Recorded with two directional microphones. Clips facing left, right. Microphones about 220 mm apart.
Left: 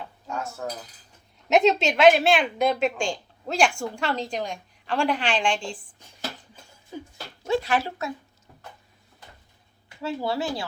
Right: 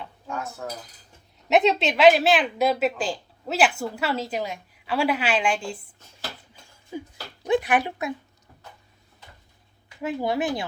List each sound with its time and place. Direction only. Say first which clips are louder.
0.6 s a woman's voice: left 1 dB; centre (ahead or behind)
6.9 s speech: right 3 dB; 10° right (ahead or behind)
10.0 s speech: right 2 dB; 15° right (ahead or behind)